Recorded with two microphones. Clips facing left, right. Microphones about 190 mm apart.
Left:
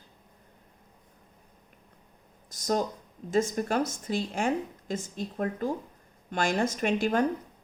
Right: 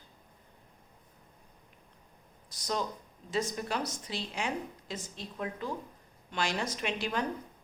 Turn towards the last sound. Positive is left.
turn(degrees=45)  # may be behind; listen again after turning